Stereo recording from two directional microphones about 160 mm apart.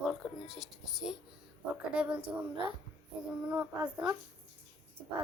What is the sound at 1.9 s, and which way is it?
Child singing, 5° right (ahead or behind).